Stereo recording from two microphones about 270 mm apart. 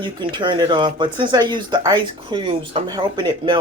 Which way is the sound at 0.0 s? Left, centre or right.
Centre.